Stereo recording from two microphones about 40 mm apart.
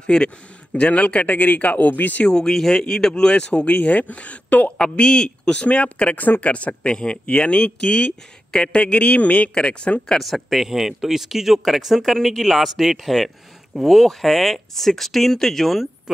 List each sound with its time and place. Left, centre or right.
0.0 s speech: left
0.7 s speech: left
2.2 s speech: centre; by 4.6 s left
4.7 s speech: left
10.1 s speech: centre
10.7 s speech: centre